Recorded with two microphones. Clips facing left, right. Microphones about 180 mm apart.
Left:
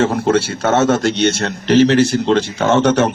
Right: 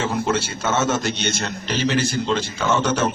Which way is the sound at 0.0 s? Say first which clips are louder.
Left 7 dB; 70° left (ahead or behind).